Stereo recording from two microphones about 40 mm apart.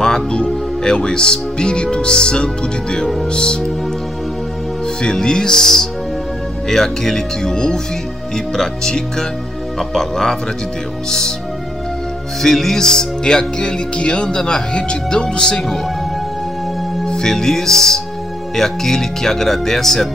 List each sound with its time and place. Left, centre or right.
0.0 s music: centre
0.8 s speech: left
5.0 s speech: centre
12.4 s speech: centre
17.0 s speech: centre